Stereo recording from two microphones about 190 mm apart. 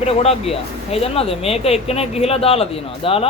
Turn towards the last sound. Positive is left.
turn(degrees=30)  # may be behind; listen again after turning